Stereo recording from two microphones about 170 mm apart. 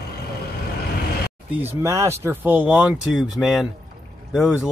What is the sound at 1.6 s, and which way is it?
Speech, 15° right (ahead or behind).